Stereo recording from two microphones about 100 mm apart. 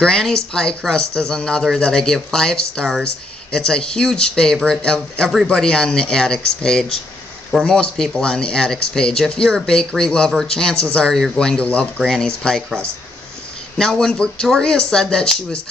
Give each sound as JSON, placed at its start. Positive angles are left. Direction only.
{"t": 0.0, "sound": "speech", "side_deg": 5}